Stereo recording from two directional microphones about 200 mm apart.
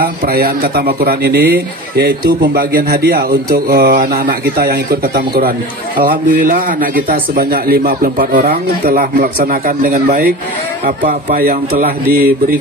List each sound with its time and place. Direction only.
0.0 s a man's voice: 45° right (ahead or behind)